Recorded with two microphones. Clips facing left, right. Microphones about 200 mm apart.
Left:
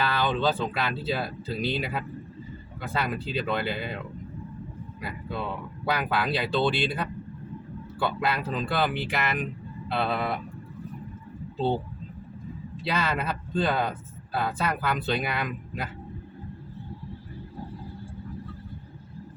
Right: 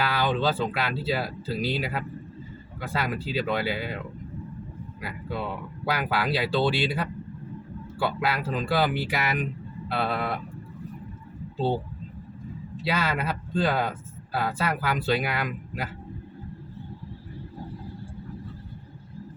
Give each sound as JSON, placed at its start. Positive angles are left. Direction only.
{"t": 0.0, "sound": "speech", "side_deg": -10}
{"t": 12.8, "sound": "speech", "side_deg": -5}